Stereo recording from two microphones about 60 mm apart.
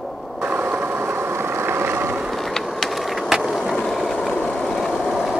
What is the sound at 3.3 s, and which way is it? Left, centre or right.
Skateboard, centre.